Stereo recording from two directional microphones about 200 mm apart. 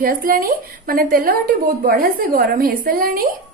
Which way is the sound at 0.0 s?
45° right (ahead or behind).